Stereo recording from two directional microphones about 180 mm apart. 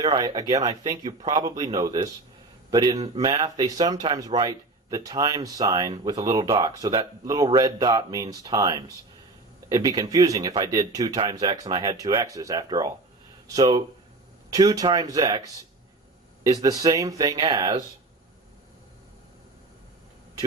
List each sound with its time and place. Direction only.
0.0 s speech: 20° right (ahead or behind)